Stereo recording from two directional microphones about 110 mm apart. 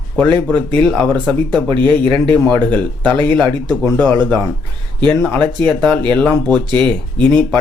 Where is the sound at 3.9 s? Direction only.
15° left (ahead or behind).